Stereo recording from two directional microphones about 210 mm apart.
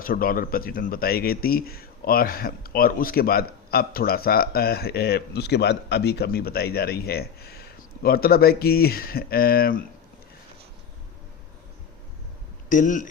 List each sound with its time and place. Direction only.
0.0 s speech: 45° left (ahead or behind)
12.6 s speech: 40° left (ahead or behind)